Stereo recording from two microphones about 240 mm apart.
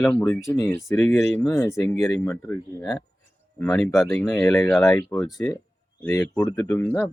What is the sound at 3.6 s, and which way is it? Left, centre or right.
Speech, centre.